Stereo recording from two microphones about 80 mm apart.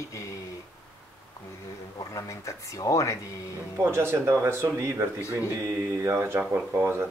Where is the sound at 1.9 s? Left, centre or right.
Left.